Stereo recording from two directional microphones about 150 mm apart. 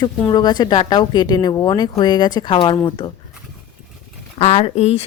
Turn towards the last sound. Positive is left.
turn(degrees=45)  # may be behind; listen again after turning